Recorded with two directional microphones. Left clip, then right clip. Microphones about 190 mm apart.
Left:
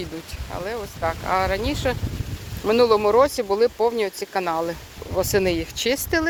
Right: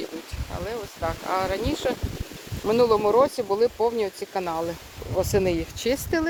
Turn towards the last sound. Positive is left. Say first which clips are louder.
# left 3 dB
turn(degrees=-10)  # may be behind; listen again after turning